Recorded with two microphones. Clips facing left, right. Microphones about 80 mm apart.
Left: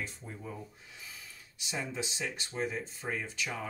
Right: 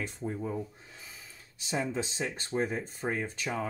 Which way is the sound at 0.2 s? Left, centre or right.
Right.